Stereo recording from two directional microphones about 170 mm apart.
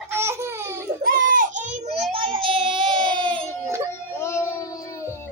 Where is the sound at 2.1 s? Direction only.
30° right (ahead or behind).